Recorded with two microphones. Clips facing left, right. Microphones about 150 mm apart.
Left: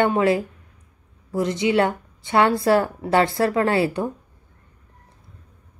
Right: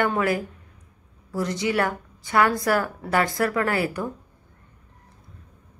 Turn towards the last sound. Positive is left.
turn(degrees=25)  # may be behind; listen again after turning